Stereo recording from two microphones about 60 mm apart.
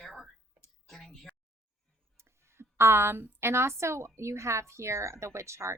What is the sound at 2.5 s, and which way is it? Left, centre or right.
A woman's voice, right.